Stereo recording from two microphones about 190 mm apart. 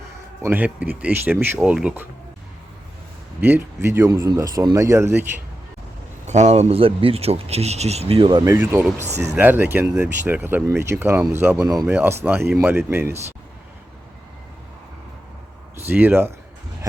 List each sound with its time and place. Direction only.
0.4 s speech: 10° right (ahead or behind)
3.4 s speech: 10° right (ahead or behind)
6.2 s speech: 35° right (ahead or behind)
8.5 s speech: 10° right (ahead or behind)
9.0 s speech: 35° right (ahead or behind)
9.3 s speech: 10° right (ahead or behind)
15.9 s speech: 10° right (ahead or behind)